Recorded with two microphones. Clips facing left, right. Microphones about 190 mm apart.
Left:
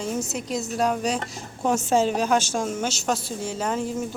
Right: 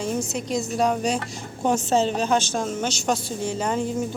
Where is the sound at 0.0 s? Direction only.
5° left (ahead or behind).